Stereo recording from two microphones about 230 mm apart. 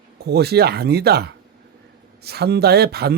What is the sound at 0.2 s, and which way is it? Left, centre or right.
A man's voice, right.